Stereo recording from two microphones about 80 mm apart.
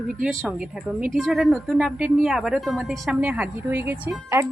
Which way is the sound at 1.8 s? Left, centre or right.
Centre.